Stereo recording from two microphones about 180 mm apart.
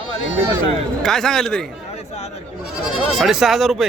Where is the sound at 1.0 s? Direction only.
Centre (ahead or behind).